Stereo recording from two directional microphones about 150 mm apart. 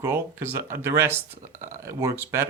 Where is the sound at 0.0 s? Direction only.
15° right (ahead or behind).